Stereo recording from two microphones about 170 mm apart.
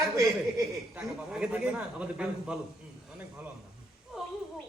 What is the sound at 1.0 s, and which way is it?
A man's voice, 5° right (ahead or behind).